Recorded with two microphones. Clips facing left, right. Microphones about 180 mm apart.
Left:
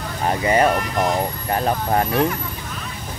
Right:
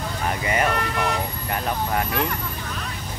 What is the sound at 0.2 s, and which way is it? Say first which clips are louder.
Speech: left 7 dB; 35° left (ahead or behind).